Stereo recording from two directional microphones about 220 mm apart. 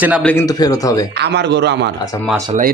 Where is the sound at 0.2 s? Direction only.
5° left (ahead or behind).